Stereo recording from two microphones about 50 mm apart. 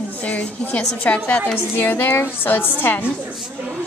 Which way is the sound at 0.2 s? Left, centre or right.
Left.